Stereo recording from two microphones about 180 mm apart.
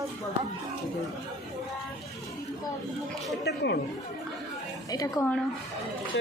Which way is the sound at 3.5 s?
65° left (ahead or behind).